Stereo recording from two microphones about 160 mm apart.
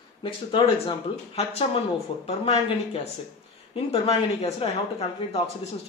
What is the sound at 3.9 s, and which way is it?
A man's voice, 40° left (ahead or behind).